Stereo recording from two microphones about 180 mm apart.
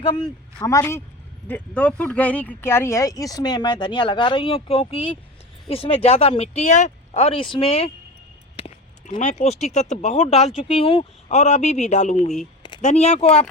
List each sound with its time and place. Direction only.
0.0 s speech: 25° left (ahead or behind)
8.5 s a sound: 40° left (ahead or behind)
9.4 s speech: 40° left (ahead or behind)